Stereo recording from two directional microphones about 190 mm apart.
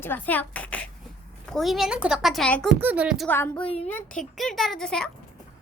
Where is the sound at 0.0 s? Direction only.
10° left (ahead or behind); by 3.2 s 5° right (ahead or behind).